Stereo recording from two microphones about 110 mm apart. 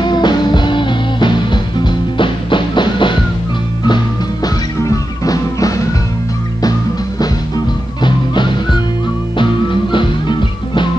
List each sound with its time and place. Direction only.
0.0 s music: 40° left (ahead or behind)
4.8 s music: 35° left (ahead or behind)
7.2 s music: 40° left (ahead or behind)